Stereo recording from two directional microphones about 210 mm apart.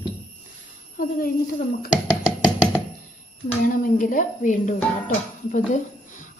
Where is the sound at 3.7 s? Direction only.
40° left (ahead or behind).